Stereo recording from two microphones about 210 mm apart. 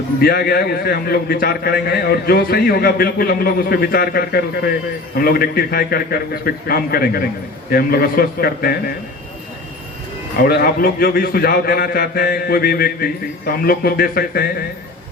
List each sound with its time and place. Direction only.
0.2 s a man's voice: 45° left (ahead or behind)
10.3 s a man's voice: 45° left (ahead or behind)